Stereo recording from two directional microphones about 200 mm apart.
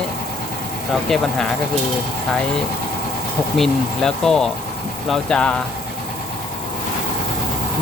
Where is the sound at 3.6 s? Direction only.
5° left (ahead or behind).